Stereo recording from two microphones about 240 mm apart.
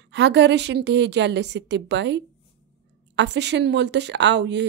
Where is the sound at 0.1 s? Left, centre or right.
Right.